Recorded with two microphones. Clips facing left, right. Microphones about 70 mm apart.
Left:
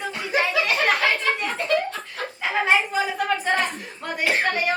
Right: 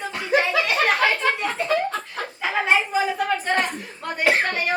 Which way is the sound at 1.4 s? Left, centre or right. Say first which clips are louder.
Even; centre.